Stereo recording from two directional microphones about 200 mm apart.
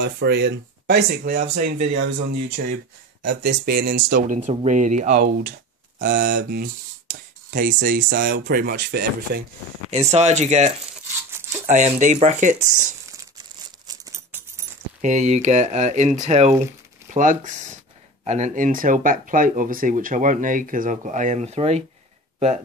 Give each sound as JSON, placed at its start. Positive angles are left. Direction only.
{"t": 0.0, "sound": "speech", "side_deg": -60}
{"t": 2.6, "sound": "speech", "side_deg": -55}
{"t": 9.8, "sound": "speech", "side_deg": -35}
{"t": 13.7, "sound": "a sound", "side_deg": -20}
{"t": 15.0, "sound": "speech", "side_deg": -35}